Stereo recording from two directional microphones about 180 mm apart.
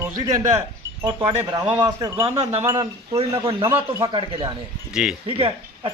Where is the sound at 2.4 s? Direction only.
35° right (ahead or behind).